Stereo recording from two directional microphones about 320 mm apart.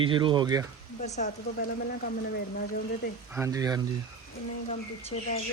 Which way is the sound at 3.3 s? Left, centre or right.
Centre.